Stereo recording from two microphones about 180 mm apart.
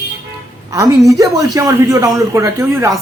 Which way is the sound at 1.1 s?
20° right (ahead or behind).